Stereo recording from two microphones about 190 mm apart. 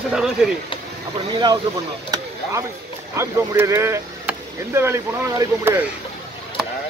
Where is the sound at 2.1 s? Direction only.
15° right (ahead or behind).